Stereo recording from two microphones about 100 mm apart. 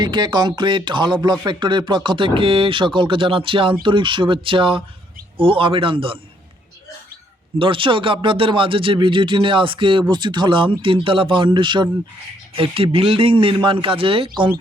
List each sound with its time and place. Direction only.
0.0 s speech: 50° right (ahead or behind)
7.6 s speech: 60° right (ahead or behind)
12.5 s speech: 65° right (ahead or behind)